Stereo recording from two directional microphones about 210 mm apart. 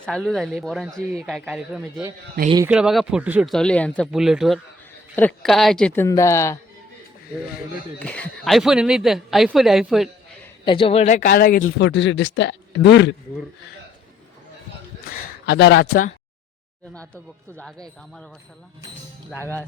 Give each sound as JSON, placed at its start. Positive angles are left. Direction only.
{"t": 0.0, "sound": "a woman's voice", "side_deg": 0}
{"t": 7.9, "sound": "a woman's voice", "side_deg": 5}
{"t": 10.7, "sound": "speech", "side_deg": 25}
{"t": 11.8, "sound": "speech", "side_deg": 60}
{"t": 15.1, "sound": "a sound", "side_deg": 45}
{"t": 15.4, "sound": "speech", "side_deg": 55}
{"t": 19.4, "sound": "speech", "side_deg": 10}